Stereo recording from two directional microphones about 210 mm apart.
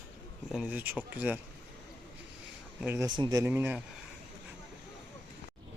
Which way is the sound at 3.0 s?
20° right (ahead or behind).